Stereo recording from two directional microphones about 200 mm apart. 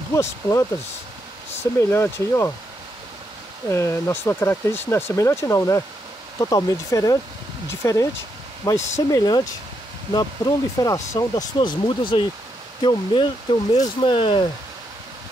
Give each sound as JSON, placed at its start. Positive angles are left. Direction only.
{"t": 0.1, "sound": "speech", "side_deg": 15}
{"t": 3.6, "sound": "speech", "side_deg": 15}